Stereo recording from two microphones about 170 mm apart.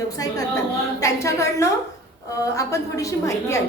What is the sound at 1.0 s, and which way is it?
A woman's voice, 15° left (ahead or behind).